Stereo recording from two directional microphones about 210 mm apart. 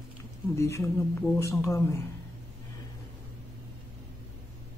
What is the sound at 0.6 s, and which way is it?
Speech, 15° left (ahead or behind).